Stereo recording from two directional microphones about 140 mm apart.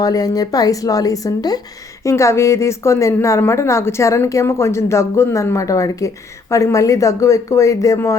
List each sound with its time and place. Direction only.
0.0 s a woman's voice: 25° left (ahead or behind)